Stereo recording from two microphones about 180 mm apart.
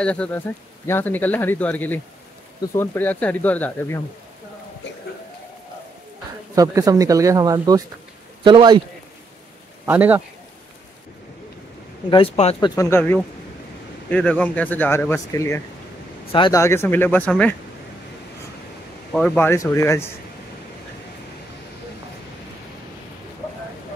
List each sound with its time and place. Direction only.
0.0 s speech: 5° left (ahead or behind)
6.5 s speech: 20° right (ahead or behind)
9.8 s a man's voice: 10° right (ahead or behind)
12.1 s speech: 30° left (ahead or behind)
12.5 s speech: 15° left (ahead or behind)
16.3 s speech: 30° left (ahead or behind)
16.5 s speech: 15° left (ahead or behind)
19.3 s speech: 15° left (ahead or behind)